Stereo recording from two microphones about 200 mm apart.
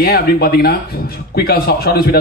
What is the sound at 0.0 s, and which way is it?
Speech, 50° left (ahead or behind).